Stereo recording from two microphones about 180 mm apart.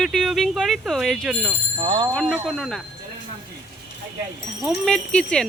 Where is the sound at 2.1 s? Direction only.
5° left (ahead or behind).